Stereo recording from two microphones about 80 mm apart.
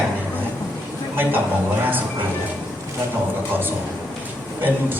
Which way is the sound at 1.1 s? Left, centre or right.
Right.